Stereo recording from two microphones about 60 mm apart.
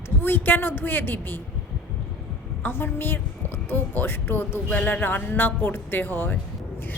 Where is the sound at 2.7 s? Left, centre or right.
Left.